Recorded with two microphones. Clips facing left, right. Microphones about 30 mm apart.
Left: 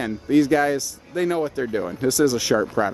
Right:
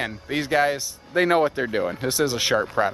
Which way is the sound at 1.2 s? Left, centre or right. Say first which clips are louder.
Right 3 dB; right.